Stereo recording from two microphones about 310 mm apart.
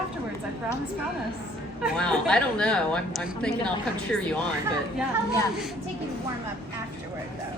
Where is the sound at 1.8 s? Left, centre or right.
Centre.